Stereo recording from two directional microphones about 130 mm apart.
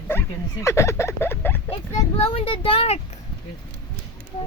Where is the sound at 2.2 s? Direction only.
45° left (ahead or behind).